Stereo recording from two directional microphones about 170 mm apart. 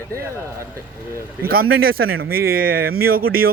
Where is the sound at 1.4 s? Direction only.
60° right (ahead or behind).